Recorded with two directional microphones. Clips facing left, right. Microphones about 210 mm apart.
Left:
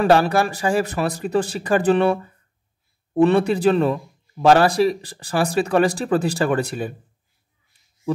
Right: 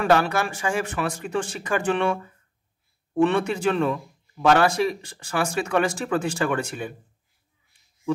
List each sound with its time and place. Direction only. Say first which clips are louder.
0.0 s a man's voice: left 4 dB; 35° left (ahead or behind)